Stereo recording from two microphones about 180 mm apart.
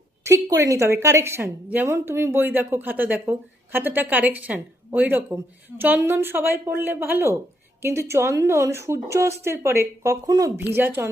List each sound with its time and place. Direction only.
0.3 s a woman's voice: 20° right (ahead or behind)